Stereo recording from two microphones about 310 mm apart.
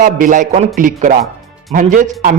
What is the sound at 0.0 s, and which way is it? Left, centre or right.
A man's voice, right.